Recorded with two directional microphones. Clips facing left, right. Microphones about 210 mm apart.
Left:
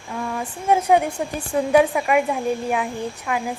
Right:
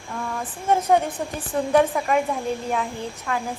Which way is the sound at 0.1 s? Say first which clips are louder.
Left 3 dB; 10° left (ahead or behind).